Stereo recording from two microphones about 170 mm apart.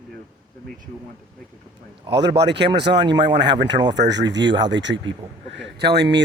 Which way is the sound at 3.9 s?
90° right.